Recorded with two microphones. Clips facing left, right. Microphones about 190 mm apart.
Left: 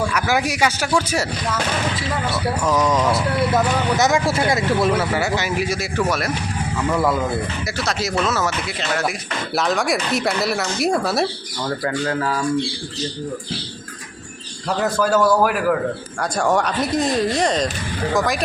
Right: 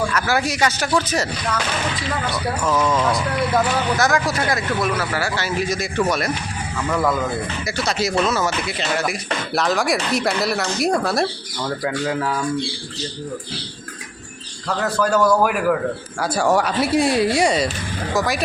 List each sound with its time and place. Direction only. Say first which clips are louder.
0.1 s speech: even; 15° left (ahead or behind)
2.8 s speech: left 1 dB; 15° left (ahead or behind)
3.9 s speech: left 4 dB; 25° left (ahead or behind); by 12.5 s centre (ahead or behind)
14.7 s speech: left 1 dB; 10° left (ahead or behind)